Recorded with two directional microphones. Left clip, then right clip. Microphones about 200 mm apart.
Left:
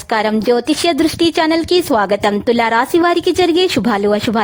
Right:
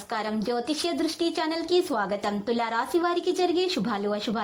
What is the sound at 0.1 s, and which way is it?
A woman's voice, 50° left (ahead or behind).